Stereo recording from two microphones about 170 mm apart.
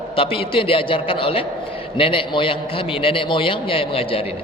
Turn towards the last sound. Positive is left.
turn(degrees=35)  # may be behind; listen again after turning